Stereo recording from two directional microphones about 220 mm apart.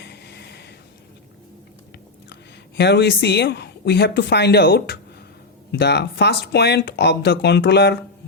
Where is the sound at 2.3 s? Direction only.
50° left (ahead or behind).